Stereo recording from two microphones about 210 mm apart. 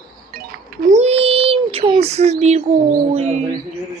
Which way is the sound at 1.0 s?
30° right (ahead or behind).